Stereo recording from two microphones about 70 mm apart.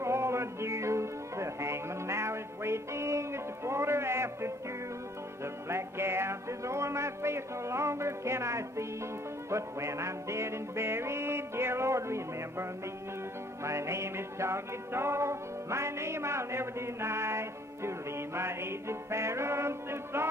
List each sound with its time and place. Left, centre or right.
0.0 s music: right
13.7 s music: right